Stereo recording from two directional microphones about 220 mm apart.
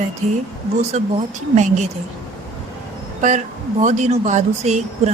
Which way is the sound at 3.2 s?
35° right (ahead or behind).